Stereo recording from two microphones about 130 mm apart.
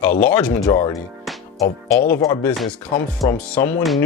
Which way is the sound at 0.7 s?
25° left (ahead or behind).